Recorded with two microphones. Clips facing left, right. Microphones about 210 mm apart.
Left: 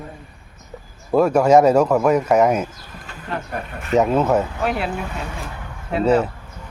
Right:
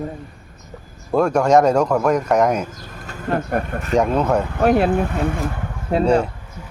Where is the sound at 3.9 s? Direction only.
5° left (ahead or behind).